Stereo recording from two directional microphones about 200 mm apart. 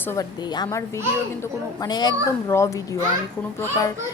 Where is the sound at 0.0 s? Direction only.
15° left (ahead or behind).